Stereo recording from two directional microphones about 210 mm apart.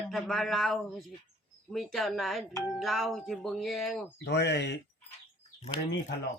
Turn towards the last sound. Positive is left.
turn(degrees=30)  # may be behind; listen again after turning